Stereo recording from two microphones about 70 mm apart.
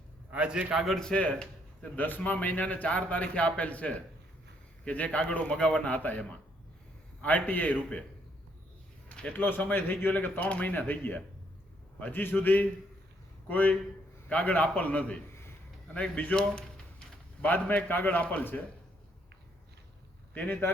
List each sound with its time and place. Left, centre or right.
0.3 s a man's voice: centre
0.9 s a man's voice: centre
2.0 s a man's voice: left
9.0 s a sound: centre
9.4 s a man's voice: left
16.3 s speech: centre
17.4 s a man's voice: left